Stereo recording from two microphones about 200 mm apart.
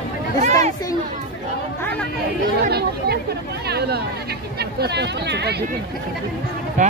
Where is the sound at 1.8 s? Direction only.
10° left (ahead or behind).